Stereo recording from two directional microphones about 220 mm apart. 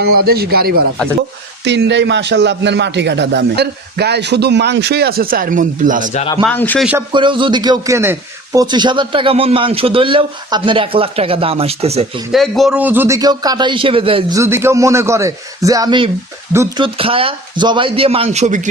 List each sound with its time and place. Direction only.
0.0 s speech: 45° right (ahead or behind)
6.4 s speech: 10° left (ahead or behind)
7.1 s a man's voice: 20° right (ahead or behind)
12.3 s a man's voice: centre (ahead or behind); by 18.7 s 35° right (ahead or behind)